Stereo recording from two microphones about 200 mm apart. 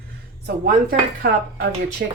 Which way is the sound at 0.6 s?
50° right (ahead or behind).